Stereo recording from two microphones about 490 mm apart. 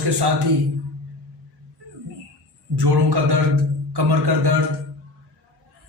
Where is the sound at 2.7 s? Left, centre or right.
Right.